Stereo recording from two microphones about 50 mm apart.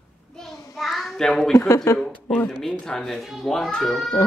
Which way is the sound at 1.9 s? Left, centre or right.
Left.